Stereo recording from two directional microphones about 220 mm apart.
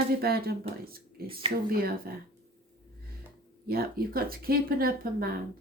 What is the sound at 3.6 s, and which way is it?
Speech, 45° right (ahead or behind).